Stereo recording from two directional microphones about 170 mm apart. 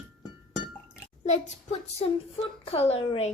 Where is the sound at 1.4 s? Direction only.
40° left (ahead or behind).